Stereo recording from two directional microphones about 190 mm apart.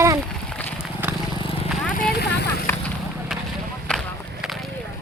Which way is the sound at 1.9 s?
50° left (ahead or behind).